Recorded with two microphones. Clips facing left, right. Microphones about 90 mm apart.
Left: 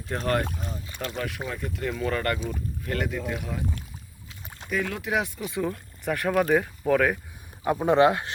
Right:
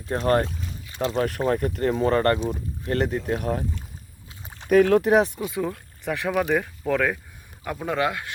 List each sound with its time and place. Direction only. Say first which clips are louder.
0.1 s speech: right 5 dB; 35° right (ahead or behind)
0.4 s speech: left 1 dB; 50° left (ahead or behind)
0.9 s speech: right 9 dB; 30° right (ahead or behind)
1.5 s speech: right 9 dB; 50° right (ahead or behind)
1.9 s speech: right 7 dB; 35° right (ahead or behind)
4.7 s speech: right 11 dB; 55° right (ahead or behind); by 5.5 s 35° right (ahead or behind)
5.6 s speech: even; centre (ahead or behind)
7.6 s speech: left 6 dB; 20° left (ahead or behind)